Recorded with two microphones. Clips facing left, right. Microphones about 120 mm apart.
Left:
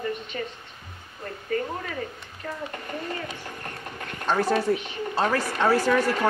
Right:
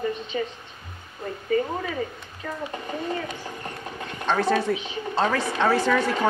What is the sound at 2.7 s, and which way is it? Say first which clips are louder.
Sewing machine: right 4 dB; 10° right (ahead or behind).